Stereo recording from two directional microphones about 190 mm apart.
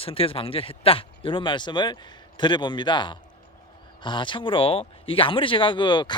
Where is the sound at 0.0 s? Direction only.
30° left (ahead or behind).